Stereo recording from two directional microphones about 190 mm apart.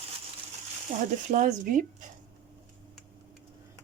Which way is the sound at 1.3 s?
45° right (ahead or behind).